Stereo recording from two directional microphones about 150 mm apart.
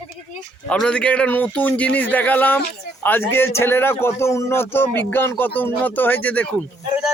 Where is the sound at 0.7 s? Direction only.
5° left (ahead or behind).